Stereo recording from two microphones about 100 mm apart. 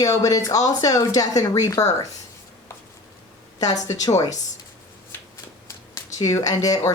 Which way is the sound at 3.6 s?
35° left (ahead or behind).